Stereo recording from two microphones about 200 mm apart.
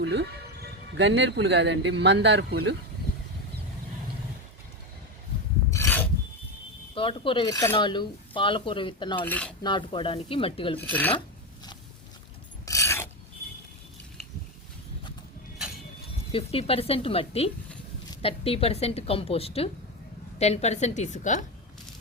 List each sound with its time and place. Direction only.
0.0 s speech: 60° right (ahead or behind)
5.7 s filing: 10° left (ahead or behind)
6.9 s speech: 25° left (ahead or behind)
7.5 s speech: 15° left (ahead or behind)
9.2 s speech: 5° left (ahead or behind)
9.6 s speech: 25° left (ahead or behind)
10.8 s speech: 10° left (ahead or behind)
12.6 s filing: 15° left (ahead or behind)
16.3 s a woman's voice: 30° left (ahead or behind)